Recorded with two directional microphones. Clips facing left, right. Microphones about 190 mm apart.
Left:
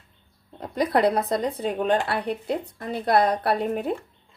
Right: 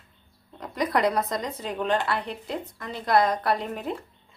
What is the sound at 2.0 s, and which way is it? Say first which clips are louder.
Speech: left 4 dB; 60° left (ahead or behind).